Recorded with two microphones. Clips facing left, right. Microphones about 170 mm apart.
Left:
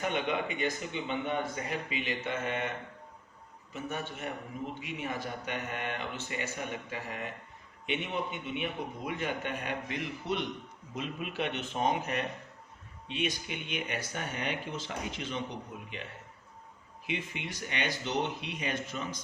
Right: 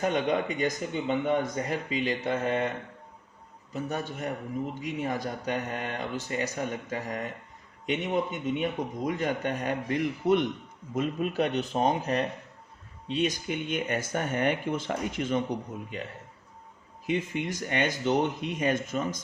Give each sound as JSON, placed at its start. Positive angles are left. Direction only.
{"t": 0.0, "sound": "a man's voice", "side_deg": -40}
{"t": 17.1, "sound": "speech", "side_deg": -45}